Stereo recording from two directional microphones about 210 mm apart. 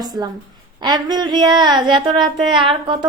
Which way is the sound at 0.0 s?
20° right (ahead or behind).